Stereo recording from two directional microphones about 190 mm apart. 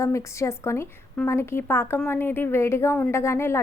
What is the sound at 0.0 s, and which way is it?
A woman's voice, 15° left (ahead or behind).